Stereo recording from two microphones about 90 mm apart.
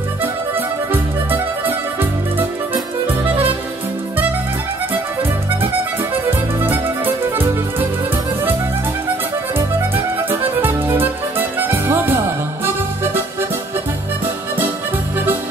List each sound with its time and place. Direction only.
1.3 s music: 20° right (ahead or behind)
6.1 s music: 20° right (ahead or behind)
10.6 s music: 20° right (ahead or behind)